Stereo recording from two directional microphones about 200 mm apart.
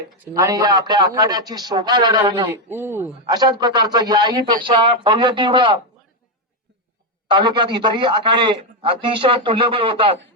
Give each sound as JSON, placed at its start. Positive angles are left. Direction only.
{"t": 0.3, "sound": "a man's voice", "side_deg": -15}
{"t": 2.5, "sound": "a man's voice", "side_deg": -10}
{"t": 7.3, "sound": "a man's voice", "side_deg": -25}